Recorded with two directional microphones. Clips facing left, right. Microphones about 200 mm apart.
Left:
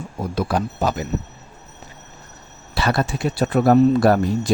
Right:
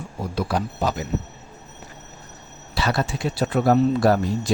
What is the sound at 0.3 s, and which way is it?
Speech, 50° left (ahead or behind).